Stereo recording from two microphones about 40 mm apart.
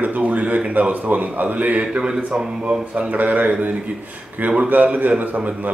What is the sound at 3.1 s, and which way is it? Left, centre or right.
Speech, right.